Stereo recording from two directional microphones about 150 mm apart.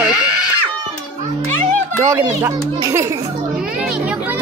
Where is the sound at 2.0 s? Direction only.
25° right (ahead or behind).